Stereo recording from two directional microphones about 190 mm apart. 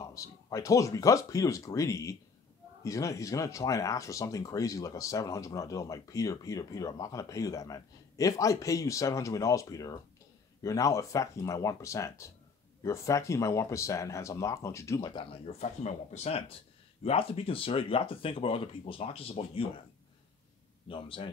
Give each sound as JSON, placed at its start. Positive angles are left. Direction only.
{"t": 0.0, "sound": "speech", "side_deg": 15}
{"t": 20.9, "sound": "speech", "side_deg": 25}